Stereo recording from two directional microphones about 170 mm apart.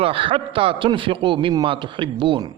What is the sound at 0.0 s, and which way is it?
A man's voice, 30° right (ahead or behind).